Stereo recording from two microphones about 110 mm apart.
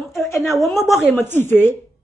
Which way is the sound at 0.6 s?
Centre (ahead or behind).